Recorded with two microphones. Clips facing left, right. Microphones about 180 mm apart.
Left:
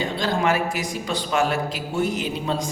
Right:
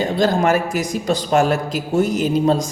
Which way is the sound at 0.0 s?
45° right (ahead or behind).